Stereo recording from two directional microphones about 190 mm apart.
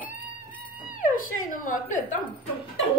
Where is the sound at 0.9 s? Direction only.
45° left (ahead or behind).